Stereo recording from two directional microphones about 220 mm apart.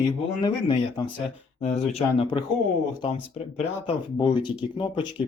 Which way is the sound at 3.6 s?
25° left (ahead or behind).